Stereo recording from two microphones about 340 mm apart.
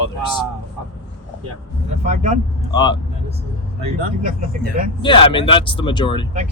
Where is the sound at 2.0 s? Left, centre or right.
Right.